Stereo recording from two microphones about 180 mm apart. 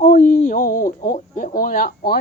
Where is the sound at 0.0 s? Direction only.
45° left (ahead or behind).